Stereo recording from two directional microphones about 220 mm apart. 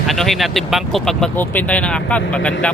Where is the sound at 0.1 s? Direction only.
Centre (ahead or behind).